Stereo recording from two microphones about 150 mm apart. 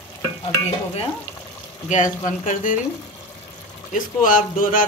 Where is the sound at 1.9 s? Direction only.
60° left (ahead or behind).